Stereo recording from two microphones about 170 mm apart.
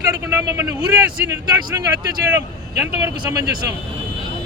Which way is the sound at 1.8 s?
20° right (ahead or behind).